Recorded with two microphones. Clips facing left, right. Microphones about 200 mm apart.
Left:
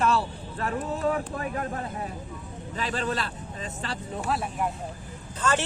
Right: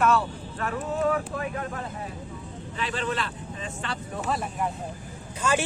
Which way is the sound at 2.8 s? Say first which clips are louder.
Even; 40° left (ahead or behind).